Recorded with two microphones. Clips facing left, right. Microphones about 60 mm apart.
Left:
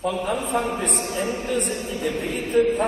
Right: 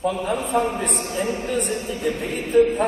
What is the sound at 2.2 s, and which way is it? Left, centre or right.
Speech, right.